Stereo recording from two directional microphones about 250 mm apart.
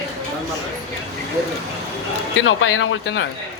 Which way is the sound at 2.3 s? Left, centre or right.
Left.